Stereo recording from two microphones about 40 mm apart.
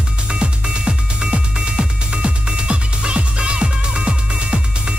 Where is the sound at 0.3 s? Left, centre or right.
Right.